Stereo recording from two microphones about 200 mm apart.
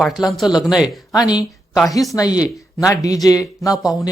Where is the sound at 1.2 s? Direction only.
20° left (ahead or behind).